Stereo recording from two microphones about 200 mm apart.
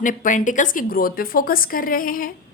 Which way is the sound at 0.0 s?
40° left (ahead or behind).